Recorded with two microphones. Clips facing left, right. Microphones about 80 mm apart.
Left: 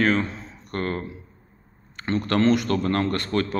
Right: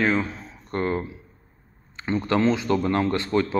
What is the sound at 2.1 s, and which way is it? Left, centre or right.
A man's voice, centre.